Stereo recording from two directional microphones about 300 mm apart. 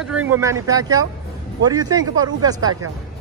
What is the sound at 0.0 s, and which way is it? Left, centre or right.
Speech, centre.